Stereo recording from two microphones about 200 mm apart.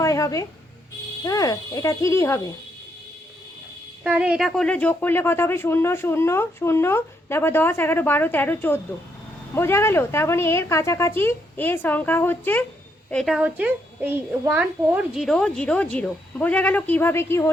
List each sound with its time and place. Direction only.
0.0 s a sound: 15° left (ahead or behind)
1.2 s speech: 15° left (ahead or behind)
4.0 s a child's voice: 5° right (ahead or behind); by 17.5 s 10° left (ahead or behind)